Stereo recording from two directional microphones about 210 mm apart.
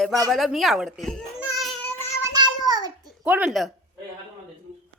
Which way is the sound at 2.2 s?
20° right (ahead or behind).